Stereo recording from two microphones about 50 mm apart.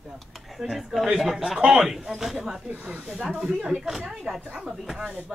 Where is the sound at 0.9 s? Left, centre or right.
Centre.